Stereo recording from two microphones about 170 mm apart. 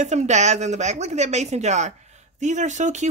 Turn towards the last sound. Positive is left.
turn(degrees=-45)  # may be behind; listen again after turning